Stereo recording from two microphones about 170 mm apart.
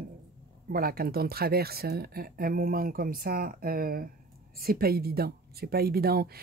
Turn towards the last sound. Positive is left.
turn(degrees=-65)  # may be behind; listen again after turning